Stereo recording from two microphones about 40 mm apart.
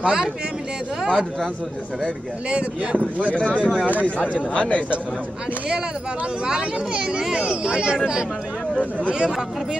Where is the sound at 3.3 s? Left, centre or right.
Left.